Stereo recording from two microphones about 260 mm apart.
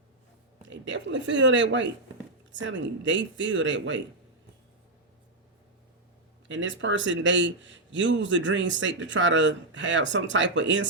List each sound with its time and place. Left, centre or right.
0.6 s a man's voice: right
6.5 s a man's voice: right